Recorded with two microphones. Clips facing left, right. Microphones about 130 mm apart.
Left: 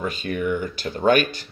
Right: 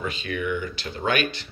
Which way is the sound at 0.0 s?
45° left (ahead or behind).